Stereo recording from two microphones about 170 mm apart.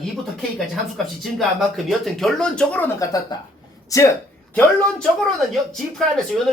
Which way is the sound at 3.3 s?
25° left (ahead or behind).